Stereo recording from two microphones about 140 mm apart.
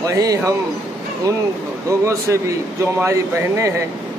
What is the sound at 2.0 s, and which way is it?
Speech, 20° right (ahead or behind).